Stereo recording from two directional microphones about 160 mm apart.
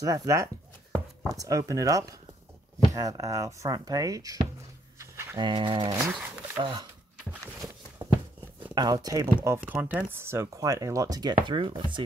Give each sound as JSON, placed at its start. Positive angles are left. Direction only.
{"t": 0.0, "sound": "speech", "side_deg": -20}
{"t": 4.9, "sound": "a sound", "side_deg": -15}
{"t": 5.4, "sound": "speech", "side_deg": -30}
{"t": 8.7, "sound": "speech", "side_deg": -25}